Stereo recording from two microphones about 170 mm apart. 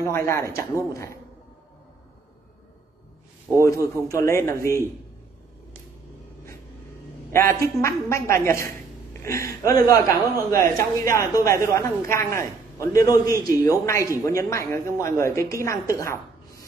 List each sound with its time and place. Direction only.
0.0 s a man's voice: 15° left (ahead or behind)
3.9 s a man's voice: 20° left (ahead or behind)
7.3 s a man's voice: 15° left (ahead or behind)